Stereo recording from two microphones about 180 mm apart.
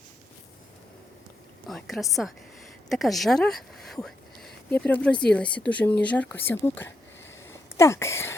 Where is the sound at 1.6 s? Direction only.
Centre (ahead or behind).